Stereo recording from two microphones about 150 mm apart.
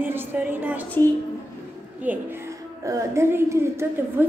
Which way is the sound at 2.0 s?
15° right (ahead or behind).